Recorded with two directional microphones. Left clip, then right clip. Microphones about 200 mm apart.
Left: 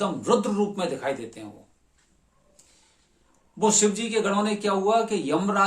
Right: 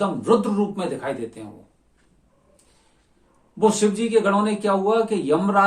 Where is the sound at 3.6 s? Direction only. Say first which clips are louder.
Right 3 dB; 15° left (ahead or behind).